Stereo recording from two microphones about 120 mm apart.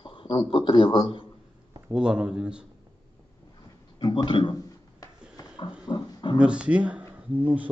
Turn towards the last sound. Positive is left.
turn(degrees=-15)  # may be behind; listen again after turning